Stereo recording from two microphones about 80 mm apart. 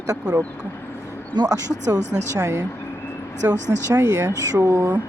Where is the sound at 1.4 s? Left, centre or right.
Right.